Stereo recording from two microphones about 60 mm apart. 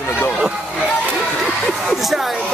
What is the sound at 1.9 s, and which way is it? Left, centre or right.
Speech, centre.